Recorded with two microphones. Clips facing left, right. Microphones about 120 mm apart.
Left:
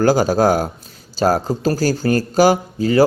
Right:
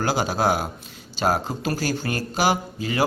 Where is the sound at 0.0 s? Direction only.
40° left (ahead or behind).